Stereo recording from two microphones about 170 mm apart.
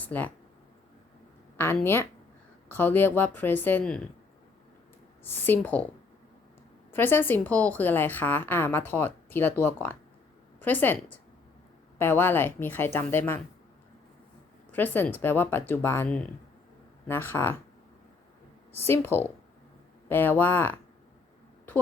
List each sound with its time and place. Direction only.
0.0 s speech: 10° left (ahead or behind)
1.5 s a woman's voice: 15° left (ahead or behind)
5.2 s a woman's voice: 15° left (ahead or behind)
6.9 s a woman's voice: 10° left (ahead or behind)
14.7 s a woman's voice: 10° left (ahead or behind)
18.7 s a woman's voice: 15° left (ahead or behind)